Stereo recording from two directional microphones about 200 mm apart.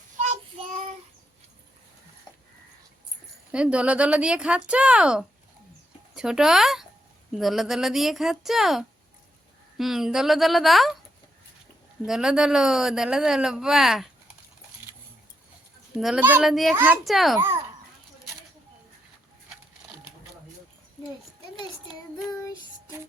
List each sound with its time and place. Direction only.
0.2 s child singing: 35° right (ahead or behind)
3.5 s speech: 5° right (ahead or behind)
12.0 s speech: 5° right (ahead or behind)
16.0 s speech: centre (ahead or behind)
17.3 s a child's voice: 10° right (ahead or behind)